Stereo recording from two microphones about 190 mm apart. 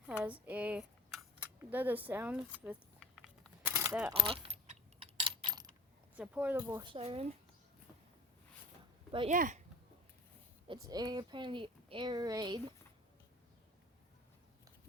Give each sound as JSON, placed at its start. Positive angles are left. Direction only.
{"t": 0.2, "sound": "a sound", "side_deg": -5}
{"t": 1.4, "sound": "speech", "side_deg": -10}
{"t": 3.6, "sound": "a sound", "side_deg": -10}
{"t": 4.1, "sound": "keys jangling", "side_deg": -30}
{"t": 6.1, "sound": "speech", "side_deg": -10}
{"t": 6.8, "sound": "speech", "side_deg": -30}
{"t": 9.3, "sound": "speech", "side_deg": -45}
{"t": 10.7, "sound": "speech", "side_deg": -20}